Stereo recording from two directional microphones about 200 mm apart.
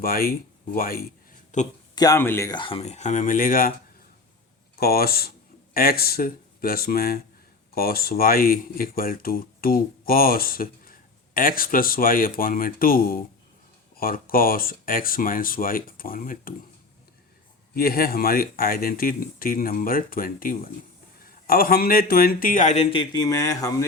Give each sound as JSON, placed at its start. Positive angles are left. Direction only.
{"t": 0.0, "sound": "speech", "side_deg": 45}
{"t": 2.0, "sound": "speech", "side_deg": 15}
{"t": 4.8, "sound": "speech", "side_deg": 50}
{"t": 17.7, "sound": "speech", "side_deg": 50}